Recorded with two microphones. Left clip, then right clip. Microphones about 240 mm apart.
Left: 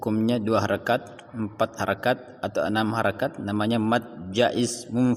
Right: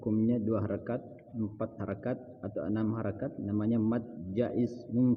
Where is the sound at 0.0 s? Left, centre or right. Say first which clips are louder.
Left 6 dB; centre.